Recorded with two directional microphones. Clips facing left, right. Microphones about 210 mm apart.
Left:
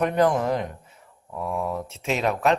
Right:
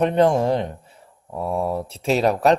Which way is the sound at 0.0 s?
25° right (ahead or behind).